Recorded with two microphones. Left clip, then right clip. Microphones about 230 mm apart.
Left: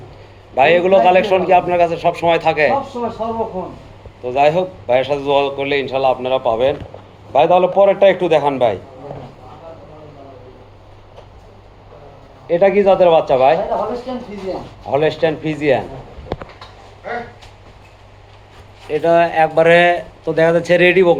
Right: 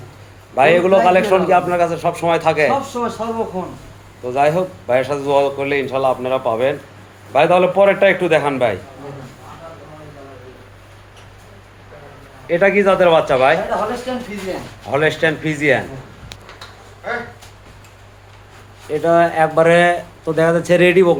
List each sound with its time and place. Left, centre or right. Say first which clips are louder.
0.5 s speech: left 1 dB; centre
4.2 s speech: left 2 dB; centre
12.5 s speech: left 1 dB; centre
13.7 s a man's voice: even; right
14.9 s speech: even; centre
18.9 s speech: left 1 dB; centre